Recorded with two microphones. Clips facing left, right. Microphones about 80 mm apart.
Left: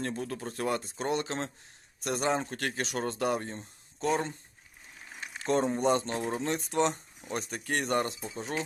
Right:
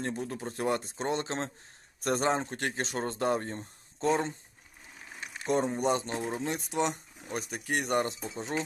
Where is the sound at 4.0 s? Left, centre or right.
Right.